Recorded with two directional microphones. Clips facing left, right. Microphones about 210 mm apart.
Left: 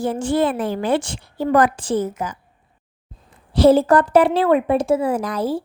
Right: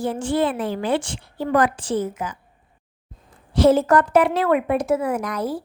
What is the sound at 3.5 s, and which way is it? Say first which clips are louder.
A woman's voice: left 3 dB; 35° left (ahead or behind).